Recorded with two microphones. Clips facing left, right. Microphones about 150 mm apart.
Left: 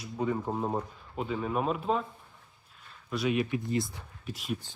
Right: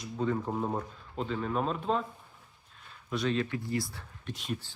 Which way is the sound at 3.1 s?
5° left (ahead or behind).